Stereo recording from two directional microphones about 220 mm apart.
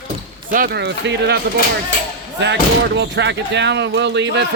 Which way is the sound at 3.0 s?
50° right (ahead or behind).